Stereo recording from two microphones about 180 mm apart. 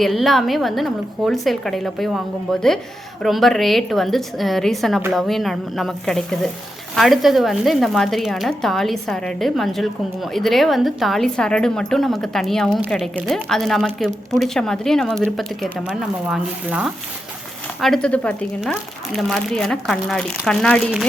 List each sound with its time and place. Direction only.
0.0 s a woman's voice: centre (ahead or behind)